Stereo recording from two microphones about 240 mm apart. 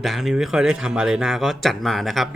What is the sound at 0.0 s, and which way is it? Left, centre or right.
Speech, centre.